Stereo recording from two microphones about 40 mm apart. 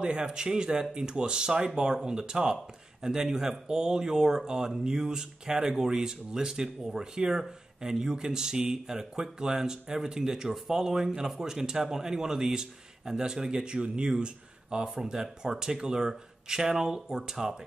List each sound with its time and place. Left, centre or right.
0.0 s speech: right